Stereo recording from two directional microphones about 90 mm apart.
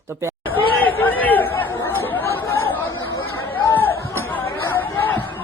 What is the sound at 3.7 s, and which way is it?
Chatter, 20° left (ahead or behind).